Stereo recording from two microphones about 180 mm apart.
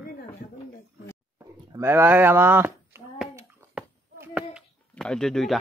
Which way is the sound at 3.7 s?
5° right (ahead or behind).